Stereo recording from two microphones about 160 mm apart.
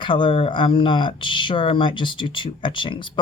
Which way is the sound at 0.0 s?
30° left (ahead or behind).